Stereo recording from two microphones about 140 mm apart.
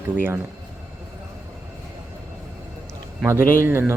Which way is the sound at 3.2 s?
20° right (ahead or behind).